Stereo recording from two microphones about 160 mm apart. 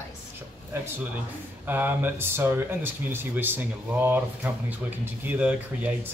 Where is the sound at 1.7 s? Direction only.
10° right (ahead or behind).